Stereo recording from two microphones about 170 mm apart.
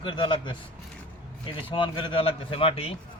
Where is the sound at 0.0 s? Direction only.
30° left (ahead or behind).